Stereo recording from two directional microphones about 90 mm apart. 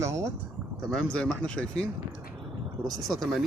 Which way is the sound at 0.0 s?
35° right (ahead or behind).